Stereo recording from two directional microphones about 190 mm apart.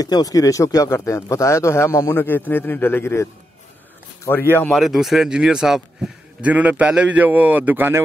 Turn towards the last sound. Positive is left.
turn(degrees=-10)  # may be behind; listen again after turning